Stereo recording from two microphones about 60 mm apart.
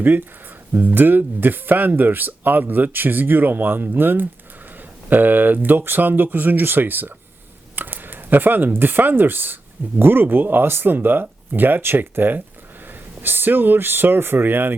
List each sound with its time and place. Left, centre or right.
0.0 s speech: right